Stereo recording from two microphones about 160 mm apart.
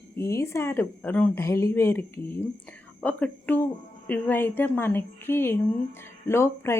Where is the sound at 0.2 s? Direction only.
20° left (ahead or behind).